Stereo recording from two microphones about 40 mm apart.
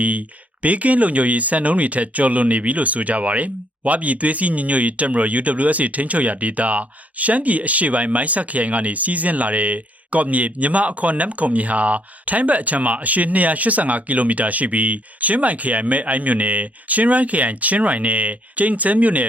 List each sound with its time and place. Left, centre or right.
0.0 s speech: right